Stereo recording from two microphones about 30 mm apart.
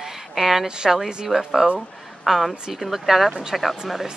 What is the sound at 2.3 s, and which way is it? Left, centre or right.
A woman's voice, centre.